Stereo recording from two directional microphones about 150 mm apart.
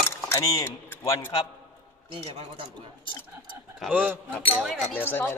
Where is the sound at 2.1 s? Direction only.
40° right (ahead or behind).